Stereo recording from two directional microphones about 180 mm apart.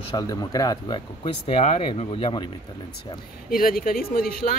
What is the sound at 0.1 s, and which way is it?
Speech, 20° left (ahead or behind).